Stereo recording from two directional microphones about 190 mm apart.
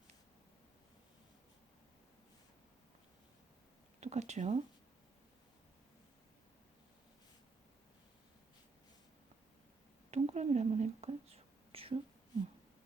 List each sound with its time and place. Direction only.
4.0 s speech: 35° right (ahead or behind)
10.1 s whispering: 35° right (ahead or behind)